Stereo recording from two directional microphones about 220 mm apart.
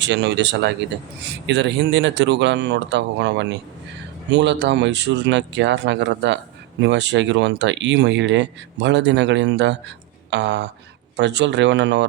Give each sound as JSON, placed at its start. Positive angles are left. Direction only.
{"t": 0.0, "sound": "speech", "side_deg": -55}